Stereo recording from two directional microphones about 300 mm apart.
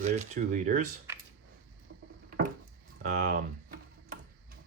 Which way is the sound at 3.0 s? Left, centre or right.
Right.